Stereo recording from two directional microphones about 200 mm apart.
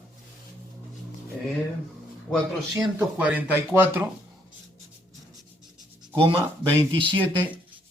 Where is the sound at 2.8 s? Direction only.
5° right (ahead or behind).